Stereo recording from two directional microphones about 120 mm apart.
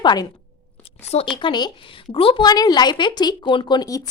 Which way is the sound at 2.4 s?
35° left (ahead or behind).